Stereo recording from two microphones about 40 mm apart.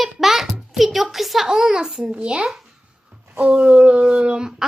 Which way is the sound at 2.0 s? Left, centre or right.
Right.